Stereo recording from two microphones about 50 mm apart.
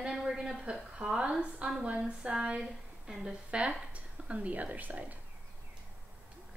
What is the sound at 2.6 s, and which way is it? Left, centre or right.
Speech, centre.